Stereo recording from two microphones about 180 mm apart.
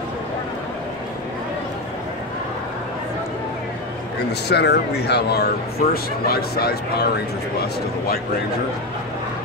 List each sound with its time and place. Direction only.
4.3 s speech: 65° left (ahead or behind)